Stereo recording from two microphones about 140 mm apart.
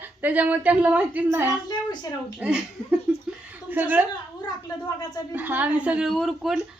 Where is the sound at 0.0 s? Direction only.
10° right (ahead or behind).